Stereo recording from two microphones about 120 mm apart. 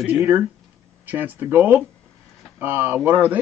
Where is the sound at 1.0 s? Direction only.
15° right (ahead or behind).